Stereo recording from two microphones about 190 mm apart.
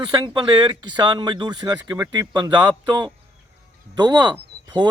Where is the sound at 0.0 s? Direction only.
25° right (ahead or behind).